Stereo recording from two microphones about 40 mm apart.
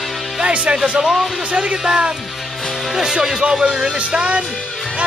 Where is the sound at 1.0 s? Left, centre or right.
Centre.